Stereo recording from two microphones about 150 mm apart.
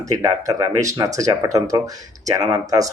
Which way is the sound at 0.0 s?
20° right (ahead or behind).